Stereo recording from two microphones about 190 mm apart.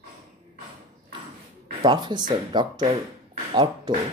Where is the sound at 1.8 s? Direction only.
25° right (ahead or behind).